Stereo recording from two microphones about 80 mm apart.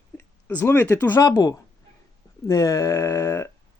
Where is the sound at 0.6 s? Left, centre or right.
Left.